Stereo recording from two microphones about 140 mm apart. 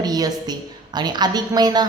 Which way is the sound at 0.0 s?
30° right (ahead or behind).